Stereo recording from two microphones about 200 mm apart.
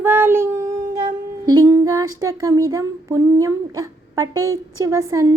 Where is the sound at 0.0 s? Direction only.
10° right (ahead or behind).